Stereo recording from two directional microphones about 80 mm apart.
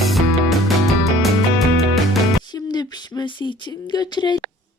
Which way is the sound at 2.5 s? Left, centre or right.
Left.